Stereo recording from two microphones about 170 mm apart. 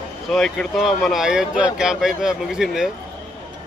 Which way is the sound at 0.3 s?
Centre (ahead or behind).